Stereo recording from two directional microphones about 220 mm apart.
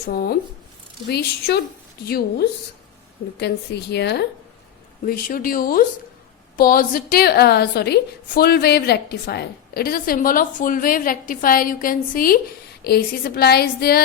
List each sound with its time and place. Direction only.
0.1 s a woman's voice: 40° left (ahead or behind)